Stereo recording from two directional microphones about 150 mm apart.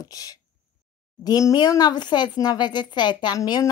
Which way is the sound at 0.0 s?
25° left (ahead or behind).